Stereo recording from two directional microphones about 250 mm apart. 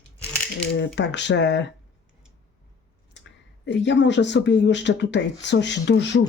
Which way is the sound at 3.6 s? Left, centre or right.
Left.